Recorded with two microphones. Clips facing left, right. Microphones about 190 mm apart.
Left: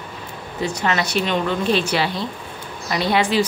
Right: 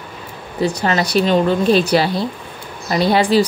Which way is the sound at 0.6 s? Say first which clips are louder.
Right 4 dB; 35° right (ahead or behind).